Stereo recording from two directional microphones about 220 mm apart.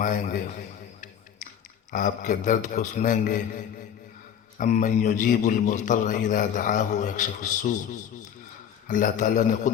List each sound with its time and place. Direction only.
0.0 s a man's voice: 35° left (ahead or behind)
1.9 s a man's voice: 35° left (ahead or behind)
4.5 s a man's voice: 35° left (ahead or behind)
8.9 s a man's voice: 35° left (ahead or behind)